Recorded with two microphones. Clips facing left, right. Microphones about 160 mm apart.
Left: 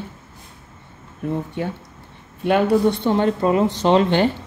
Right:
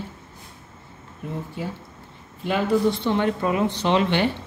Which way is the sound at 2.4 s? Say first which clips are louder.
Left 5 dB; 65° left (ahead or behind).